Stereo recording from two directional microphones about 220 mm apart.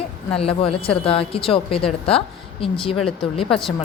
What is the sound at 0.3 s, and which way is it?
A woman's voice, 25° left (ahead or behind).